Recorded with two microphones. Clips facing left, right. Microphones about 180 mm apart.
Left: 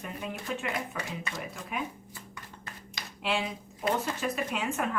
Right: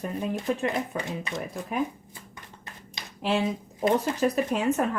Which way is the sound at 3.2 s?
40° right (ahead or behind).